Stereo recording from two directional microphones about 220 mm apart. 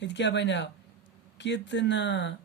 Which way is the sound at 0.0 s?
55° left (ahead or behind).